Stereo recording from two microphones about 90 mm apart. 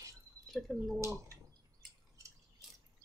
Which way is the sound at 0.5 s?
Centre (ahead or behind).